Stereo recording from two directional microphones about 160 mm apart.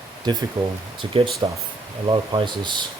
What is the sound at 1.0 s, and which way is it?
Speech, 30° right (ahead or behind).